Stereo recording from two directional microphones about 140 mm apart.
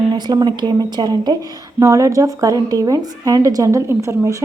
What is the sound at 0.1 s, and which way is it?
Speech, 30° right (ahead or behind).